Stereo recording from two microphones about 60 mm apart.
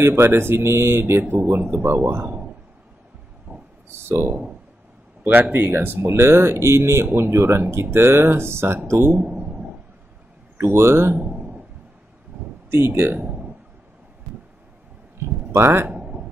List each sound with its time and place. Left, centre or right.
0.0 s speech: right
1.3 s speech: right
4.0 s speech: right
5.5 s speech: right
9.3 s a sound: right
10.6 s speech: right
11.1 s a sound: right
12.7 s speech: right
15.5 s speech: right